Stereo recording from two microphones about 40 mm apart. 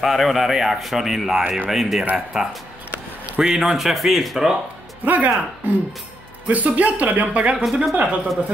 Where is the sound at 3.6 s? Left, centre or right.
Centre.